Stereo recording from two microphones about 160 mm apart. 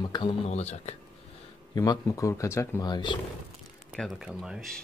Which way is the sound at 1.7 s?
25° left (ahead or behind).